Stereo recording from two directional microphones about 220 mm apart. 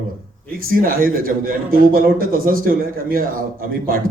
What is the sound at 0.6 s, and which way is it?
A man's voice, 40° right (ahead or behind).